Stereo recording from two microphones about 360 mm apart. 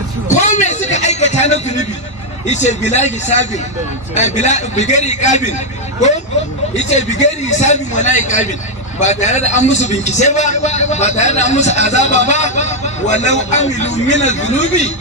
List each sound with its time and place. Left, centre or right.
0.3 s a sound: centre
2.5 s a man's voice: centre
6.7 s a man's voice: centre